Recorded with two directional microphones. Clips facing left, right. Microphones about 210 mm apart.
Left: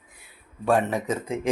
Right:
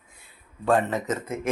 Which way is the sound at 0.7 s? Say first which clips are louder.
Even; 10° left (ahead or behind).